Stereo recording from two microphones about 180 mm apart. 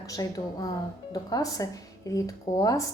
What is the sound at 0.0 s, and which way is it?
A woman's voice, 20° left (ahead or behind).